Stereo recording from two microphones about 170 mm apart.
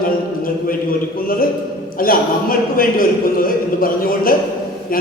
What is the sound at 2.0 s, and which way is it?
A man's voice, 55° left (ahead or behind).